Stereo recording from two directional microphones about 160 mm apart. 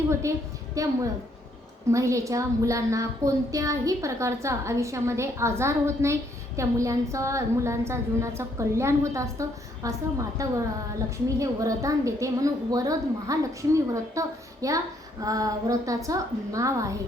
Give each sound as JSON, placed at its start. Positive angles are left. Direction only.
{"t": 0.1, "sound": "a woman's voice", "side_deg": -20}